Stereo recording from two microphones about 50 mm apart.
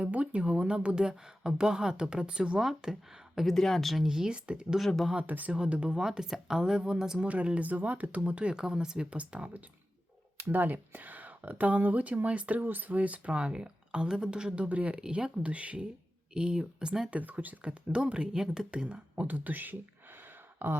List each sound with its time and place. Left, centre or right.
0.0 s speech: right
2.6 s speech: centre
3.5 s speech: centre
4.0 s speech: centre
5.2 s speech: right
5.5 s speech: centre
6.0 s speech: centre
7.3 s speech: right
8.2 s speech: right
9.0 s speech: right
10.5 s speech: right; by 17.1 s centre
17.1 s speech: right